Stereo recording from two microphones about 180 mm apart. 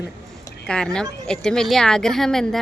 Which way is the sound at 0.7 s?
5° left (ahead or behind).